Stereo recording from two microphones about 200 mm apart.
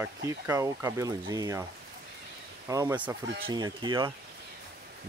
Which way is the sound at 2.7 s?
15° right (ahead or behind).